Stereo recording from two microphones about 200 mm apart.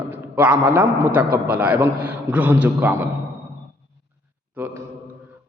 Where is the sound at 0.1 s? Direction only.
10° right (ahead or behind).